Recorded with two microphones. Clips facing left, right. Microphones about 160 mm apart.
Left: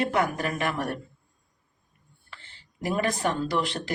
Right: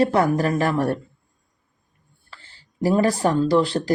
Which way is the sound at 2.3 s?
35° right (ahead or behind).